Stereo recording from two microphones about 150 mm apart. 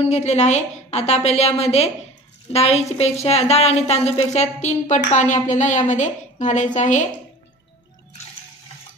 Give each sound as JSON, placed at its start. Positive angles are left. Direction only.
{"t": 0.0, "sound": "a woman's voice", "side_deg": 50}